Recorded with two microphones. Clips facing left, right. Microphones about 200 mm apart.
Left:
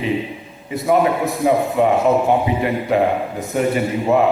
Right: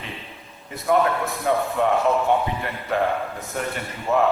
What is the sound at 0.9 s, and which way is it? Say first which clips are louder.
A man's voice: left 4 dB; 15° left (ahead or behind).